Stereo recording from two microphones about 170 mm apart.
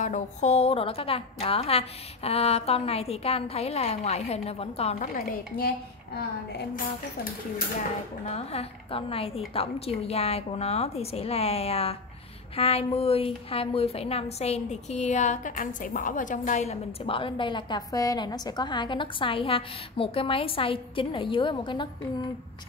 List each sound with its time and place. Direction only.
0.0 s a woman's voice: 45° left (ahead or behind)
8.3 s a woman's voice: 35° left (ahead or behind)
17.0 s a woman's voice: 30° left (ahead or behind)